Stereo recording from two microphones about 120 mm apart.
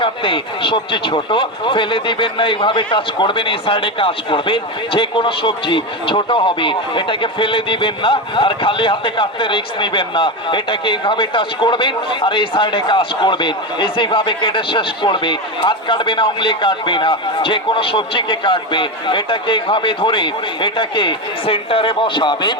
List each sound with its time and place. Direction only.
0.0 s speech: 45° left (ahead or behind)